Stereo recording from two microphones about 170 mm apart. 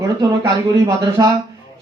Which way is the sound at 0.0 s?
20° right (ahead or behind).